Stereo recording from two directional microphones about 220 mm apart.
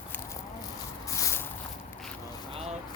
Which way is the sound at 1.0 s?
15° left (ahead or behind).